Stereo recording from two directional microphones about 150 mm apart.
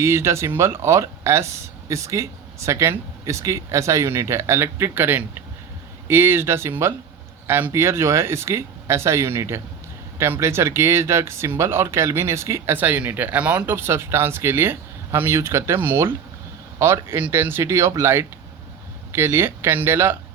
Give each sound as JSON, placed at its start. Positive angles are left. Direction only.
{"t": 0.0, "sound": "speech", "side_deg": -15}